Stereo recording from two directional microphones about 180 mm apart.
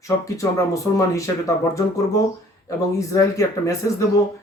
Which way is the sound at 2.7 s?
15° left (ahead or behind).